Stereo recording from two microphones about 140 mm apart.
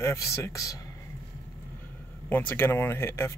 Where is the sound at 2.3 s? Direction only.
15° left (ahead or behind).